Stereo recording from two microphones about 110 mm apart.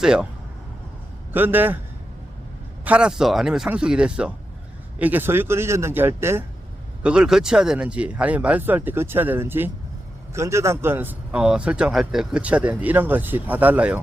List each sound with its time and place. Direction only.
0.0 s speech: 5° right (ahead or behind)
1.3 s speech: 15° right (ahead or behind)
2.8 s speech: 10° right (ahead or behind)
7.0 s speech: 10° right (ahead or behind)